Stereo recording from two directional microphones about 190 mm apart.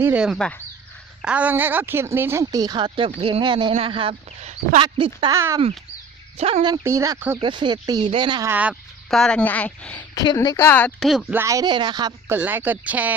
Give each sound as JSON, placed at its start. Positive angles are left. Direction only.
{"t": 0.0, "sound": "speech", "side_deg": -5}
{"t": 1.2, "sound": "a woman's voice", "side_deg": -5}
{"t": 5.3, "sound": "speech", "side_deg": -15}
{"t": 6.3, "sound": "speech", "side_deg": -30}
{"t": 6.8, "sound": "speech", "side_deg": -15}
{"t": 7.4, "sound": "a woman's voice", "side_deg": -25}
{"t": 8.4, "sound": "speech", "side_deg": -10}
{"t": 10.2, "sound": "speech", "side_deg": 20}
{"t": 12.3, "sound": "speech", "side_deg": -10}